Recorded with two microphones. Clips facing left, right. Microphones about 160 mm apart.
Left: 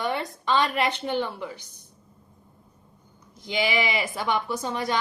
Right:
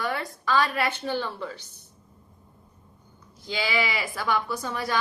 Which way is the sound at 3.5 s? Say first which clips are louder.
Left 2 dB; 20° left (ahead or behind).